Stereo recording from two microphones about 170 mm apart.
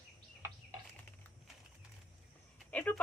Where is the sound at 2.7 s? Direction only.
10° left (ahead or behind).